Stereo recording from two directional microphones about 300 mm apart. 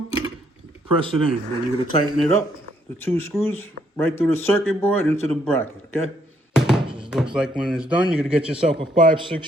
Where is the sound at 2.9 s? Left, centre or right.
Centre.